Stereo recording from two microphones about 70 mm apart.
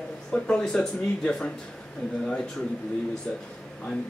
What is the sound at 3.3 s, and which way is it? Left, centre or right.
Speech, centre.